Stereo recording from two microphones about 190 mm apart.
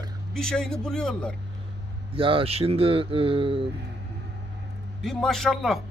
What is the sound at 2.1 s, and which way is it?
Speech, 30° right (ahead or behind).